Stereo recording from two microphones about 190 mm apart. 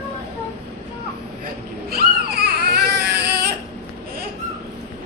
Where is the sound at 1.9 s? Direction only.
55° right (ahead or behind).